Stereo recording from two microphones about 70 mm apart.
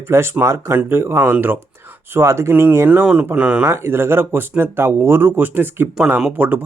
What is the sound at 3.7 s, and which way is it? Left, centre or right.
Speech, right.